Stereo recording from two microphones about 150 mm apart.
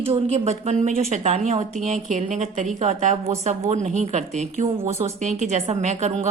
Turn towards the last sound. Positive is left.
turn(degrees=-45)  # may be behind; listen again after turning